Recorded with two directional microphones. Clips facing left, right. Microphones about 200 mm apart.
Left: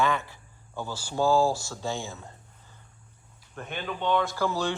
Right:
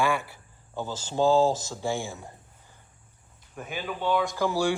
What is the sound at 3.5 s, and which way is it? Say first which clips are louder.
Speech: right 1 dB; 5° right (ahead or behind).